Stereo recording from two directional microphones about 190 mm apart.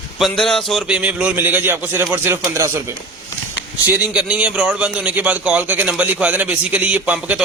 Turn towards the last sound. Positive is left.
turn(degrees=-5)  # may be behind; listen again after turning